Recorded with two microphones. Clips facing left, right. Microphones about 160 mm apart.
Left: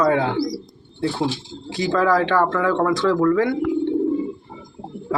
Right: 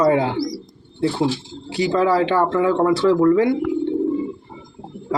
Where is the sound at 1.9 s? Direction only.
30° right (ahead or behind).